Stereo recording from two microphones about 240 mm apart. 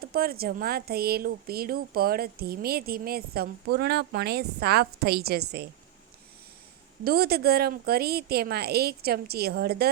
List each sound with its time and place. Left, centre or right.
0.0 s speech: right
7.0 s speech: right